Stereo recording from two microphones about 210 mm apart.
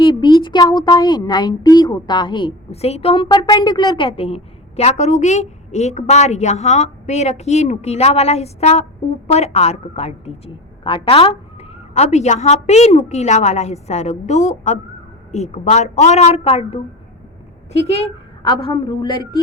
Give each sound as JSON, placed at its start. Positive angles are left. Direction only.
{"t": 0.0, "sound": "a woman's voice", "side_deg": 20}
{"t": 17.9, "sound": "a sound", "side_deg": 30}
{"t": 18.5, "sound": "speech", "side_deg": 20}